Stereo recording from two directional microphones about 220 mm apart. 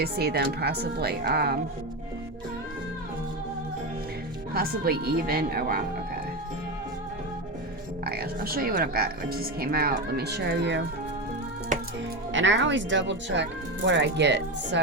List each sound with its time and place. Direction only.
0.0 s speech: 45° right (ahead or behind)
4.5 s speech: 45° right (ahead or behind)
8.0 s speech: 45° right (ahead or behind)
11.7 s music: 35° right (ahead or behind)
12.3 s speech: 55° right (ahead or behind)